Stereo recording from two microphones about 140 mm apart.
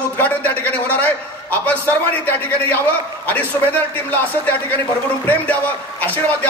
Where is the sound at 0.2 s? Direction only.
10° left (ahead or behind).